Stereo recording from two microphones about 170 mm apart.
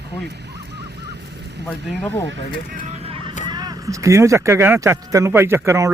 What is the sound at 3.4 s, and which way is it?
Speech, 25° right (ahead or behind).